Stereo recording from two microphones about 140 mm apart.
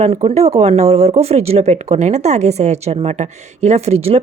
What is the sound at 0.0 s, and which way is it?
Speech, 45° right (ahead or behind).